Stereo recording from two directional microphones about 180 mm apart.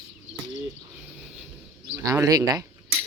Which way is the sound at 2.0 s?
20° right (ahead or behind).